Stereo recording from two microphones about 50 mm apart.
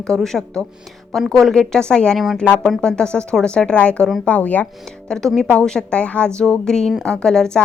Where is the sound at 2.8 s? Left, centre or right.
Centre; by 4.6 s left.